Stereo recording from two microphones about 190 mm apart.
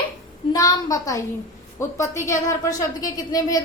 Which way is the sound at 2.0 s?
15° left (ahead or behind).